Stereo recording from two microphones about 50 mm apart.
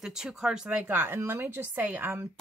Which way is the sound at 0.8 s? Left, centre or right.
Right.